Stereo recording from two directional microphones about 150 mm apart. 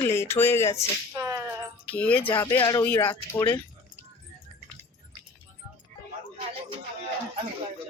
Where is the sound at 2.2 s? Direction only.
30° left (ahead or behind).